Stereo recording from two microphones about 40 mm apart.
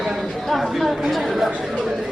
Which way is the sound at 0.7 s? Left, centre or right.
Centre.